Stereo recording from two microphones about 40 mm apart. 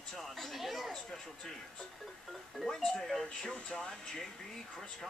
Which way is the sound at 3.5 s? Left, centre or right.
Centre.